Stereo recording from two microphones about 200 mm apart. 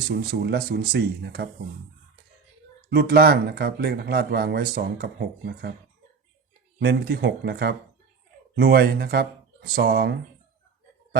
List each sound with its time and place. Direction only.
0.1 s speech: 50° right (ahead or behind)
2.9 s speech: 50° right (ahead or behind)
6.7 s speech: 55° right (ahead or behind)